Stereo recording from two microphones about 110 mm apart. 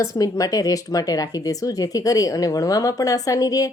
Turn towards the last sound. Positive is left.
turn(degrees=35)  # may be behind; listen again after turning